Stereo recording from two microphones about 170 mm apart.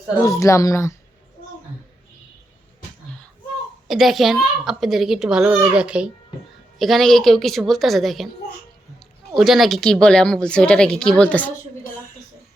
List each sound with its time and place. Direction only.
0.2 s speech: 20° left (ahead or behind)
3.8 s speech: centre (ahead or behind)